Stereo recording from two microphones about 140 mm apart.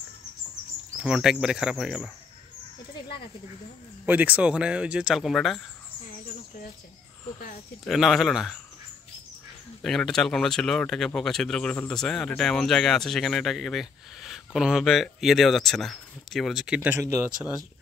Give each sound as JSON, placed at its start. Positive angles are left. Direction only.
{"t": 0.9, "sound": "speech", "side_deg": -5}
{"t": 4.0, "sound": "speech", "side_deg": -10}
{"t": 7.3, "sound": "speech", "side_deg": 75}
{"t": 7.8, "sound": "speech", "side_deg": 0}
{"t": 9.8, "sound": "speech", "side_deg": 5}